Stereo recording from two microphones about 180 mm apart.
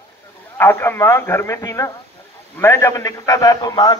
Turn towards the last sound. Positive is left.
turn(degrees=20)  # may be behind; listen again after turning